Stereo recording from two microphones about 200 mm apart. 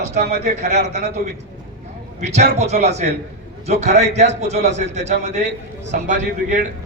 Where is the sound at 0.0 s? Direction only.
35° right (ahead or behind).